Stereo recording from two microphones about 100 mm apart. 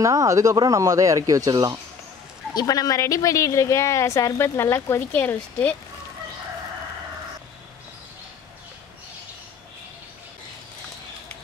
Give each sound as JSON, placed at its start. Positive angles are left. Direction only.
{"t": 0.0, "sound": "speech", "side_deg": -35}
{"t": 2.5, "sound": "speech", "side_deg": 40}